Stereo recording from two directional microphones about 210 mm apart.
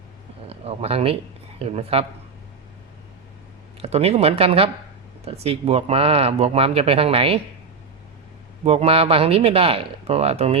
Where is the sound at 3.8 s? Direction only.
30° right (ahead or behind).